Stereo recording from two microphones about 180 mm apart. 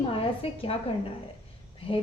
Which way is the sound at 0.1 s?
30° left (ahead or behind).